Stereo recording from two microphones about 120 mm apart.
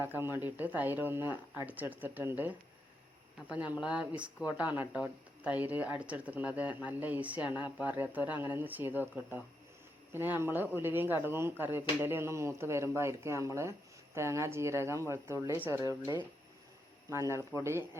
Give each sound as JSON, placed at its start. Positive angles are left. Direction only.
{"t": 0.0, "sound": "speech", "side_deg": -20}
{"t": 3.8, "sound": "speech", "side_deg": -10}
{"t": 15.8, "sound": "speech", "side_deg": -30}